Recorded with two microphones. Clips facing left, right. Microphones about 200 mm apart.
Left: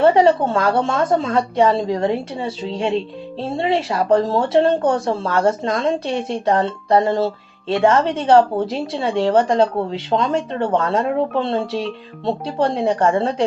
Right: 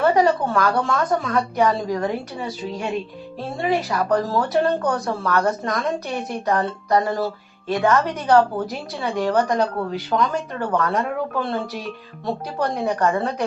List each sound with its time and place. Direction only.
0.0 s a woman's voice: 25° left (ahead or behind)